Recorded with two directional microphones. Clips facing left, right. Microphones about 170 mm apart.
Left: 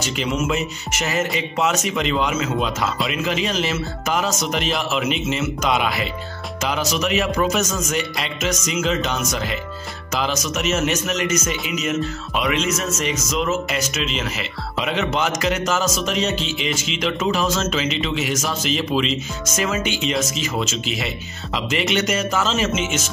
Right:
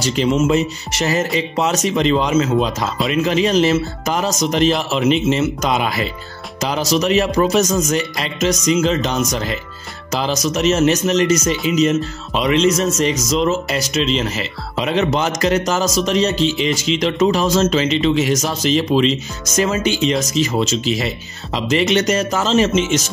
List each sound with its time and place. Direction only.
0.0 s speech: 35° right (ahead or behind)
10.1 s speech: 35° right (ahead or behind)